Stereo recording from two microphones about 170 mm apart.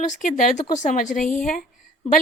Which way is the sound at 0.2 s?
50° left (ahead or behind).